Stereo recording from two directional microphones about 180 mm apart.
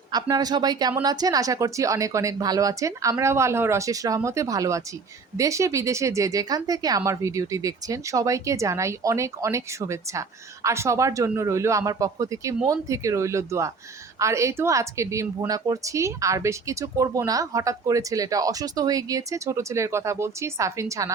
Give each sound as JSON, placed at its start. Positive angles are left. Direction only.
{"t": 0.1, "sound": "speech", "side_deg": -20}